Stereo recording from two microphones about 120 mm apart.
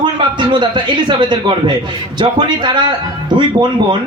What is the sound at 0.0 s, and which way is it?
A man's voice, 40° right (ahead or behind).